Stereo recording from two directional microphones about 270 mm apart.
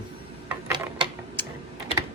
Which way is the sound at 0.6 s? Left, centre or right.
Centre.